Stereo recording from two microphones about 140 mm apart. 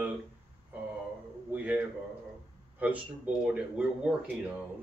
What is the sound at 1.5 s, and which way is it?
Speech, 10° right (ahead or behind).